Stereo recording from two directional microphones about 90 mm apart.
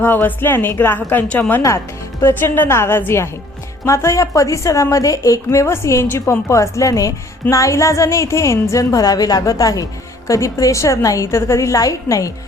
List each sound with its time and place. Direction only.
0.0 s a woman's voice: 20° left (ahead or behind); by 12.3 s 35° left (ahead or behind)